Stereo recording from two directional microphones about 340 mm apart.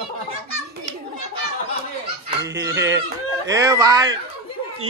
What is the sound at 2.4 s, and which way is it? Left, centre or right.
A man's voice, centre.